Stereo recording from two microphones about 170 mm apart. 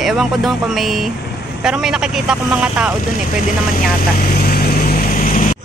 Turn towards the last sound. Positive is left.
turn(degrees=50)  # may be behind; listen again after turning